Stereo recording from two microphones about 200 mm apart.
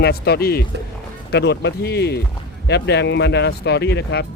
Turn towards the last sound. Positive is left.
turn(degrees=60)  # may be behind; listen again after turning